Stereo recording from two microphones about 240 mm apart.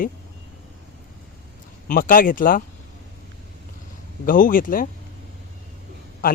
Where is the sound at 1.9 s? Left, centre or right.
Left.